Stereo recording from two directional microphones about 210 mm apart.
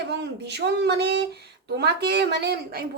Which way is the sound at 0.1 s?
55° right (ahead or behind).